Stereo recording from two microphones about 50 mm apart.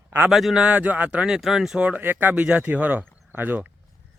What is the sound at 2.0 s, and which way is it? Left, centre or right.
Speech, right.